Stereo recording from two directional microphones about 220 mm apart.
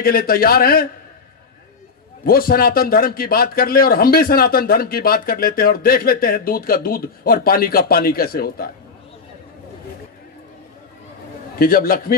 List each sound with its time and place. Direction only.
0.0 s a man's voice: 40° left (ahead or behind)
2.2 s a man's voice: 40° left (ahead or behind)
11.5 s a man's voice: 40° left (ahead or behind)